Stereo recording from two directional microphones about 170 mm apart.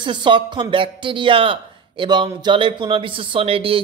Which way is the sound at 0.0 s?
25° right (ahead or behind).